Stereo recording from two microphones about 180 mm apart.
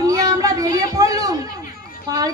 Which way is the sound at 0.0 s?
20° right (ahead or behind).